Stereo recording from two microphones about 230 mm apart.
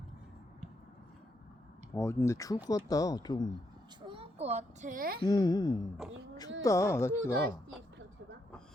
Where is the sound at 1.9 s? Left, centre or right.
Centre.